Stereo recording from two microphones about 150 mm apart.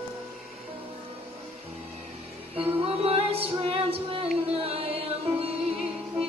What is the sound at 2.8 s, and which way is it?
Music, 40° right (ahead or behind).